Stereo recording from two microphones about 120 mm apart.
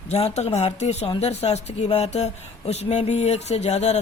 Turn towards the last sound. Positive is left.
turn(degrees=70)  # may be behind; listen again after turning